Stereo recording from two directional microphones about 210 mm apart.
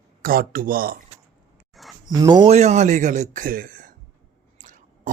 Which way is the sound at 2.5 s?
35° right (ahead or behind).